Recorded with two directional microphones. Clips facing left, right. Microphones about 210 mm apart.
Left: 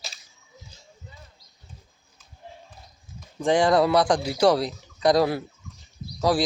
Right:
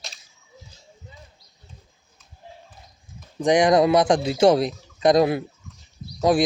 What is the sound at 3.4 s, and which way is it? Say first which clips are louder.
Speech: right 3 dB; 20° right (ahead or behind).